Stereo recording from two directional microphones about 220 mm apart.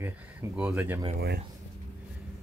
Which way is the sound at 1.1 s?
45° right (ahead or behind).